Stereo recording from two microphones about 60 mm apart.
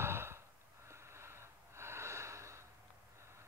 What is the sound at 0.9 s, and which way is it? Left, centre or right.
Gasp, right.